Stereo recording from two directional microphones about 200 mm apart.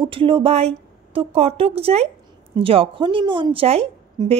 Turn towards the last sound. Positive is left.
turn(degrees=-30)  # may be behind; listen again after turning